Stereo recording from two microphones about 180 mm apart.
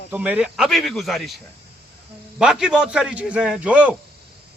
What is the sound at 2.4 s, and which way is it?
A man's voice, 5° right (ahead or behind).